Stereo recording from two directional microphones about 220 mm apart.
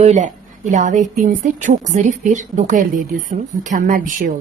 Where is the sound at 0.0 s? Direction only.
30° right (ahead or behind).